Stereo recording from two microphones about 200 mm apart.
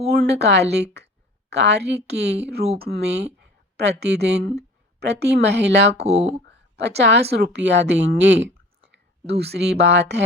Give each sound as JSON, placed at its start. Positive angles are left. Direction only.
{"t": 0.1, "sound": "a woman's voice", "side_deg": -55}
{"t": 6.0, "sound": "speech", "side_deg": -30}
{"t": 6.5, "sound": "a woman's voice", "side_deg": -60}